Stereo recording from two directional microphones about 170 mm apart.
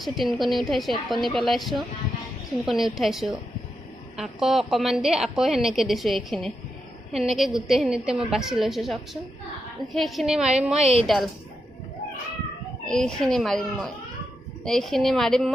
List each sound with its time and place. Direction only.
0.0 s a woman's voice: centre (ahead or behind)
10.8 s a woman's voice: 40° right (ahead or behind)
11.0 s a woman's voice: centre (ahead or behind)
12.9 s a woman's voice: 5° left (ahead or behind)